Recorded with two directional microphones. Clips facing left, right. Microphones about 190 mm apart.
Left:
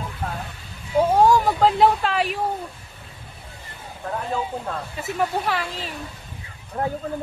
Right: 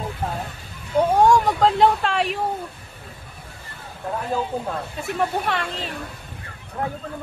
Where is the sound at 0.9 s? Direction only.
5° left (ahead or behind).